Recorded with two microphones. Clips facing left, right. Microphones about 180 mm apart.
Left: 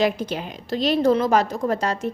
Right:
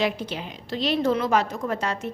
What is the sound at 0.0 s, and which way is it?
A woman's voice, 45° left (ahead or behind).